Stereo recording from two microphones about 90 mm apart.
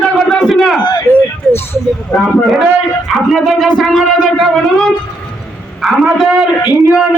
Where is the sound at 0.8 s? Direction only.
50° left (ahead or behind).